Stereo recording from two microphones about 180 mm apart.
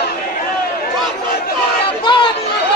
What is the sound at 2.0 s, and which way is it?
Chatter, 25° left (ahead or behind).